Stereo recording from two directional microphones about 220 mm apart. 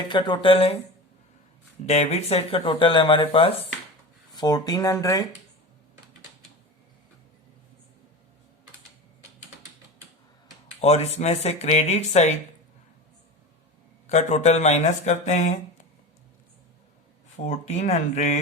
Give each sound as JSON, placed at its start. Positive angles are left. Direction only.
{"t": 0.0, "sound": "speech", "side_deg": 20}
{"t": 1.9, "sound": "speech", "side_deg": 30}
{"t": 10.8, "sound": "speech", "side_deg": 30}
{"t": 14.1, "sound": "speech", "side_deg": 30}
{"t": 17.3, "sound": "speech", "side_deg": 30}